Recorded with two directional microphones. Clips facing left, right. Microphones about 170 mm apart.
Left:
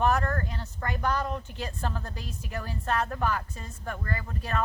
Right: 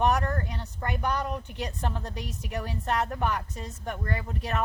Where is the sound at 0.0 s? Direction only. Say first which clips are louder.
Even; 15° right (ahead or behind).